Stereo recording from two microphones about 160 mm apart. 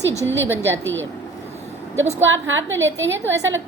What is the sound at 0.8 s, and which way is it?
Speech, 10° left (ahead or behind).